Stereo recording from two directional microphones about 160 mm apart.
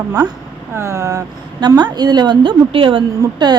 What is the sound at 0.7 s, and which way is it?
A woman's voice, 15° right (ahead or behind).